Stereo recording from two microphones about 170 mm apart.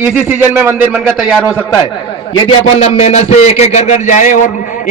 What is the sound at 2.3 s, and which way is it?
A man's voice, 35° left (ahead or behind).